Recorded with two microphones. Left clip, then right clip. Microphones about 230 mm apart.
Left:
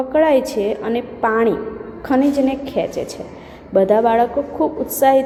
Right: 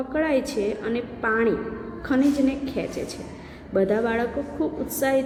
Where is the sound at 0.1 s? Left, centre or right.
Centre.